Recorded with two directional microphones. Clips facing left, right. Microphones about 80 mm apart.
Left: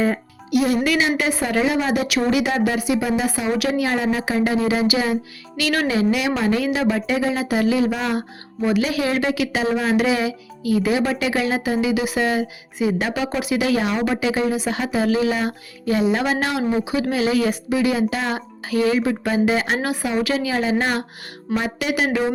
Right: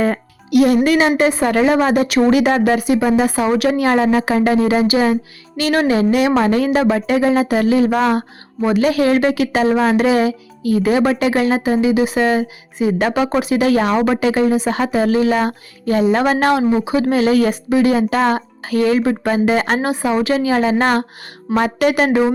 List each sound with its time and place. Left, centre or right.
0.0 s music: right
0.9 s speech: right
19.8 s speech: right
20.7 s speech: right